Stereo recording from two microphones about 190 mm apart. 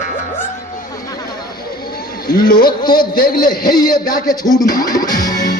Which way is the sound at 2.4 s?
20° left (ahead or behind).